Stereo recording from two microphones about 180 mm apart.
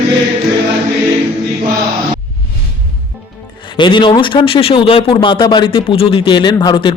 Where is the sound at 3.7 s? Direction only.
25° left (ahead or behind).